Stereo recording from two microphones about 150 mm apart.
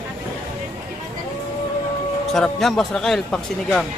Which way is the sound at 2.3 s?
Centre (ahead or behind).